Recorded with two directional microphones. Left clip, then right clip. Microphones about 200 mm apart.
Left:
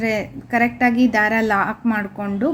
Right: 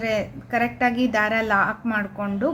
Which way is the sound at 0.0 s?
10° left (ahead or behind).